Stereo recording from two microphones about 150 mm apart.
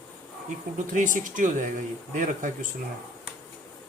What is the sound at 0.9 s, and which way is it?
Speech, 60° right (ahead or behind).